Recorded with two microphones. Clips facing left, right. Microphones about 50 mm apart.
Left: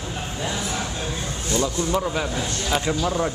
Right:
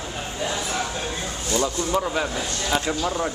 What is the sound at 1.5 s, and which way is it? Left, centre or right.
Speech, right.